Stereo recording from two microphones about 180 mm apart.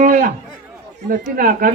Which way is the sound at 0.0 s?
45° right (ahead or behind).